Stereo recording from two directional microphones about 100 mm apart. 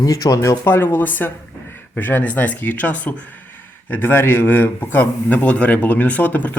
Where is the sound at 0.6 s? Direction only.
20° left (ahead or behind).